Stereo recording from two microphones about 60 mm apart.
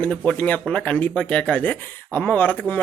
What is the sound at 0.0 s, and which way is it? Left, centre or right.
Speech, centre.